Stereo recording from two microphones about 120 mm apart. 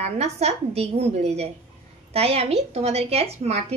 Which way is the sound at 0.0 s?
65° right (ahead or behind).